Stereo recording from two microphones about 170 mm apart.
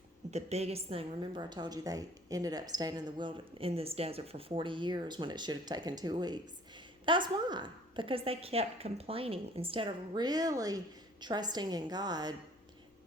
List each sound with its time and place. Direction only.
0.3 s a woman's voice: 40° right (ahead or behind); by 12.3 s 25° right (ahead or behind)